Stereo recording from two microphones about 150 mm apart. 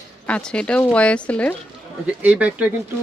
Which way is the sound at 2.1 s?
10° right (ahead or behind).